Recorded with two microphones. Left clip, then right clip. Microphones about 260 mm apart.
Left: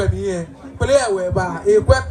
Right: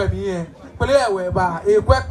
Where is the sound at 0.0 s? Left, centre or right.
Right.